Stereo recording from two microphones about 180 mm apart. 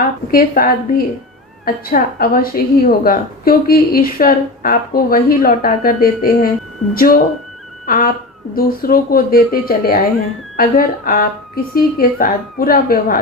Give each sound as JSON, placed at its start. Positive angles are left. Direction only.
{"t": 0.3, "sound": "a woman's voice", "side_deg": 55}